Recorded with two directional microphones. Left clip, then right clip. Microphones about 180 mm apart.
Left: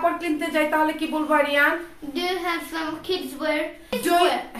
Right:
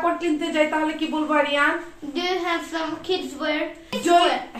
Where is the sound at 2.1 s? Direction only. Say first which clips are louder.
Right 1 dB; 10° right (ahead or behind).